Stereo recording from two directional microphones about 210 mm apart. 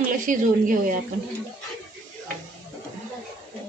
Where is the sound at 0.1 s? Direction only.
40° right (ahead or behind).